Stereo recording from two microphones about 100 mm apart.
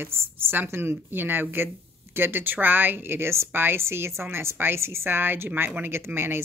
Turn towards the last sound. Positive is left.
turn(degrees=-25)  # may be behind; listen again after turning